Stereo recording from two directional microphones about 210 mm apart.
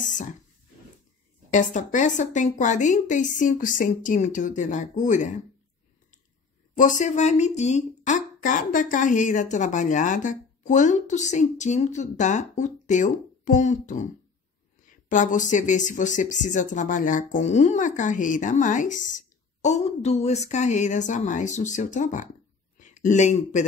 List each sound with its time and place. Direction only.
0.0 s a sound: 40° left (ahead or behind)
1.5 s speech: 35° left (ahead or behind)
6.8 s speech: 35° left (ahead or behind)